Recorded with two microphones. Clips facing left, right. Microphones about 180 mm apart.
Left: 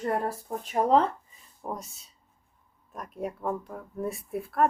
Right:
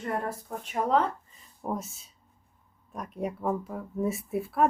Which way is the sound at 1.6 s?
Centre (ahead or behind).